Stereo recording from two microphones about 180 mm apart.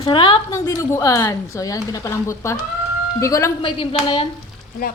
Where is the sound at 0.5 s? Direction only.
15° left (ahead or behind).